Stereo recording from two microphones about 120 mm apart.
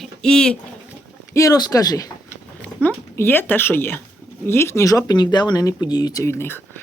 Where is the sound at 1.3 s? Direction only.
30° left (ahead or behind).